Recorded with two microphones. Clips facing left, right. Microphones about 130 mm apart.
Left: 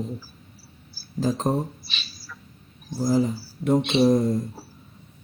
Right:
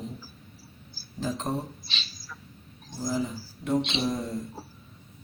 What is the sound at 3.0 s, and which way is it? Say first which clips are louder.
Speech: left 8 dB; 45° left (ahead or behind).